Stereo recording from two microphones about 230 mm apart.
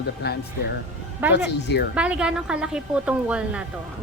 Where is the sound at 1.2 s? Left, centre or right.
Centre.